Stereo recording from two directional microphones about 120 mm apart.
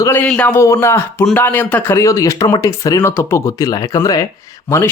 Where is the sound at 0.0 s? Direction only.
20° left (ahead or behind).